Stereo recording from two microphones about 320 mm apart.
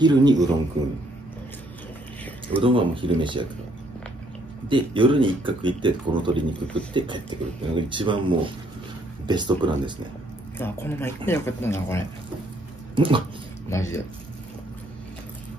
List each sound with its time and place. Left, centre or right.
0.0 s speech: centre
2.6 s speech: centre
4.6 s speech: centre
10.6 s speech: centre
12.9 s dog: centre
13.7 s speech: centre